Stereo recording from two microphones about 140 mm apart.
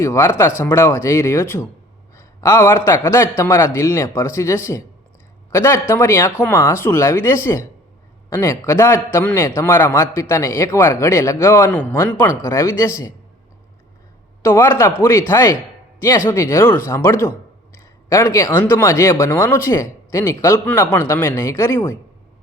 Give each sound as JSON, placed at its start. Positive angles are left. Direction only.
{"t": 0.0, "sound": "speech", "side_deg": 20}
{"t": 14.4, "sound": "speech", "side_deg": 20}